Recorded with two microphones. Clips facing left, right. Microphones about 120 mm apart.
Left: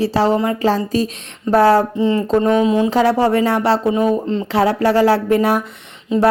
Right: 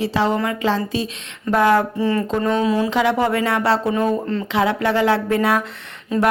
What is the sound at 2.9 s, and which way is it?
A woman's voice, 40° left (ahead or behind).